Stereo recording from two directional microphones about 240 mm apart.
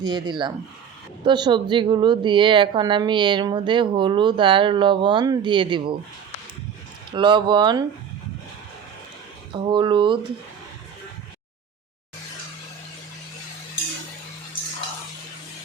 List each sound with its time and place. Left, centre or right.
0.0 s a woman's voice: centre
7.1 s a woman's voice: centre
9.5 s a woman's voice: centre